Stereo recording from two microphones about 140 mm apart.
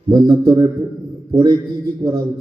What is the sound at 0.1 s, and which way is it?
A man's voice, 25° right (ahead or behind).